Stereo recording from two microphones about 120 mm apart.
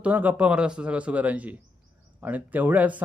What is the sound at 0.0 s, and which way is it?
Speech, 15° right (ahead or behind).